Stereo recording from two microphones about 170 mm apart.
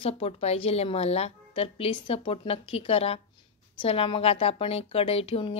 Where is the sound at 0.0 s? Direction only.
35° left (ahead or behind).